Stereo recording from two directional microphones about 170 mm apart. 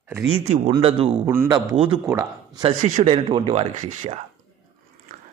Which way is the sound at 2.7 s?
40° right (ahead or behind).